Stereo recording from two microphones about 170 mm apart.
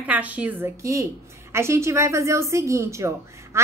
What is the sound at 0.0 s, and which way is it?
A woman's voice, 10° right (ahead or behind).